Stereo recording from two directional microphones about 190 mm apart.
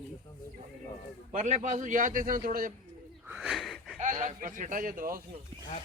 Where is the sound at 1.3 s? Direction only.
40° right (ahead or behind).